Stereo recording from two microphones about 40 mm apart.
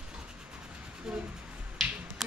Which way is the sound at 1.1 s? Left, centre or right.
Centre.